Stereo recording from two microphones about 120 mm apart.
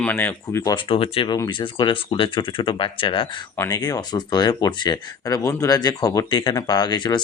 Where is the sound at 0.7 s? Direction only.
50° left (ahead or behind).